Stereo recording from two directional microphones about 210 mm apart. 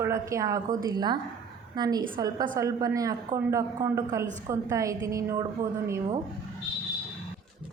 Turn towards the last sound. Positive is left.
turn(degrees=-15)  # may be behind; listen again after turning